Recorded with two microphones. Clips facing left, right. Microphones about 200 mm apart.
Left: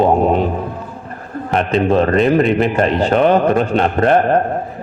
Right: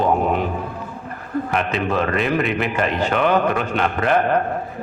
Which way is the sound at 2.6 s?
35° left (ahead or behind).